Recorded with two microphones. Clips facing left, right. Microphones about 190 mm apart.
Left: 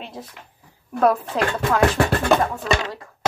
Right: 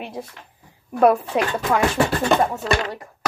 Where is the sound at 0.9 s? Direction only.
10° right (ahead or behind).